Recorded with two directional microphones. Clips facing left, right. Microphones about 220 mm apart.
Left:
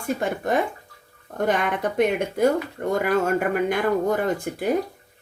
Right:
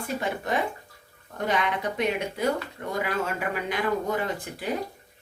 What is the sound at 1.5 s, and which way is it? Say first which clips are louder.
A woman's voice: left 3 dB; 50° left (ahead or behind).